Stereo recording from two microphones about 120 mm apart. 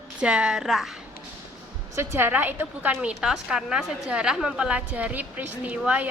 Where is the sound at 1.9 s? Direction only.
20° right (ahead or behind).